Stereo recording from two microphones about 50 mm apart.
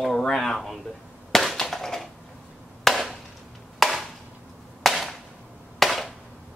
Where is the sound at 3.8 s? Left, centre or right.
Centre.